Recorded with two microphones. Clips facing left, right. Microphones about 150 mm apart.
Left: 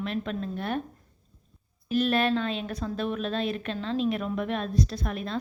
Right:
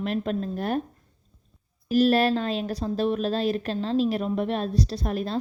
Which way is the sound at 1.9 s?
40° right (ahead or behind).